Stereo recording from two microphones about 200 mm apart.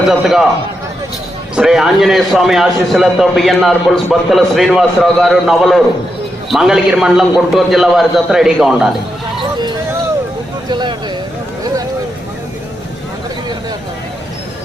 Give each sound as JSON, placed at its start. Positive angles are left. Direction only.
{"t": 0.1, "sound": "a man's voice", "side_deg": 0}
{"t": 1.5, "sound": "a man's voice", "side_deg": 0}
{"t": 10.7, "sound": "a sound", "side_deg": -20}